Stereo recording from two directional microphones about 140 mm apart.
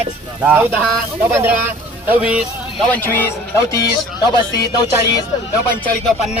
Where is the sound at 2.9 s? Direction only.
15° left (ahead or behind).